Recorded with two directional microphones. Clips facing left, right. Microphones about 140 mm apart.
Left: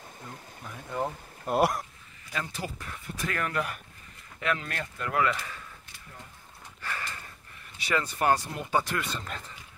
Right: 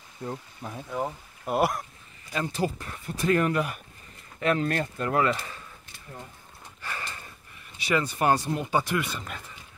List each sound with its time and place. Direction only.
0.3 s speech: 45° right (ahead or behind)
0.8 s speech: 5° right (ahead or behind)
2.3 s speech: 30° right (ahead or behind)
4.4 s speech: 35° right (ahead or behind)
6.8 s a sound: 20° right (ahead or behind)
7.7 s speech: 15° right (ahead or behind)